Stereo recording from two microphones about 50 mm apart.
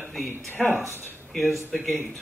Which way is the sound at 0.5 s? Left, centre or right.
Left.